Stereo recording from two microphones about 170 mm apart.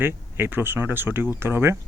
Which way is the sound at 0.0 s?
15° right (ahead or behind).